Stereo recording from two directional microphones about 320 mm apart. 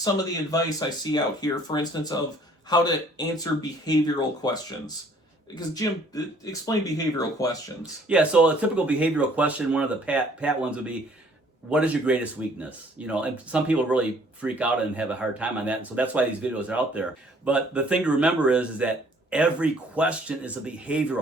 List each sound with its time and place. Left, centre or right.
0.5 s speech: centre
5.5 s speech: centre
7.8 s speech: centre